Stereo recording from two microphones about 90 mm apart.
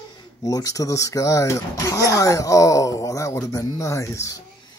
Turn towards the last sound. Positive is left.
turn(degrees=35)  # may be behind; listen again after turning